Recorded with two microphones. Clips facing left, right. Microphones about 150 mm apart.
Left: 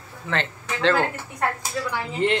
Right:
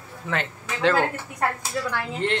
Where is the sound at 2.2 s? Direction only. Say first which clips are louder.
Left 4 dB; 5° left (ahead or behind).